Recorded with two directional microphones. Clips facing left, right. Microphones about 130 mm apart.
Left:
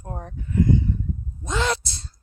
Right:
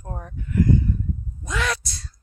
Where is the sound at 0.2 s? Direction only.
30° left (ahead or behind).